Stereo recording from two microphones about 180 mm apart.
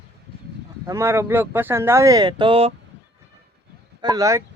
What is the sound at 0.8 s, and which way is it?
Speech, 15° right (ahead or behind).